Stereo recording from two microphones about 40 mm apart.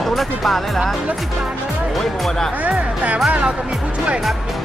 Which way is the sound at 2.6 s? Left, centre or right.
Right.